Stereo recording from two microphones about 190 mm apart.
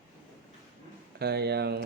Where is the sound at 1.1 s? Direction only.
55° right (ahead or behind).